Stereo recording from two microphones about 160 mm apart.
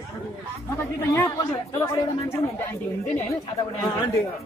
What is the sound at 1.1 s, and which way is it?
Speech, 20° left (ahead or behind).